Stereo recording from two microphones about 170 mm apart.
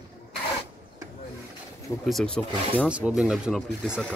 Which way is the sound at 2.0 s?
5° left (ahead or behind).